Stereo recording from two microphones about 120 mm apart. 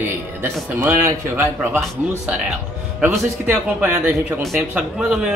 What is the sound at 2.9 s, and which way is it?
Speech, 15° right (ahead or behind).